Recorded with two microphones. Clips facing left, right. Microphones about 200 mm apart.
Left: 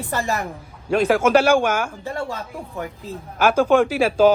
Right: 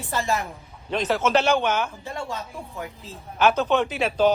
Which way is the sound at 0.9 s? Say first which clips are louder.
Left 6 dB; 10° left (ahead or behind).